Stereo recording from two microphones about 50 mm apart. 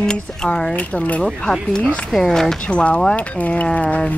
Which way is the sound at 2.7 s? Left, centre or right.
Left.